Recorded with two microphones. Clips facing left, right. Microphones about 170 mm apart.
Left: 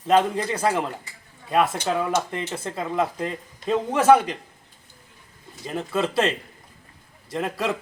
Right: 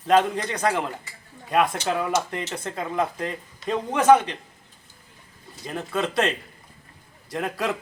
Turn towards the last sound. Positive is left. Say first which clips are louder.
# left 1 dB
turn(degrees=0)  # may be behind; listen again after turning